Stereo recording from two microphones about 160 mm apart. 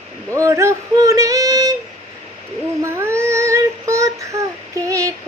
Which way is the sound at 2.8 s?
15° right (ahead or behind).